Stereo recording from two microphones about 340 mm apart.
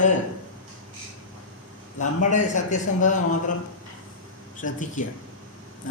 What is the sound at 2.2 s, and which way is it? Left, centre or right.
Speech, left.